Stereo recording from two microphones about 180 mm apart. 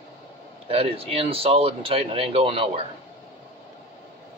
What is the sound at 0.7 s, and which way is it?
Speech, 35° right (ahead or behind).